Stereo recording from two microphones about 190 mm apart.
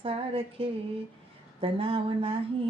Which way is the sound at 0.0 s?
30° right (ahead or behind).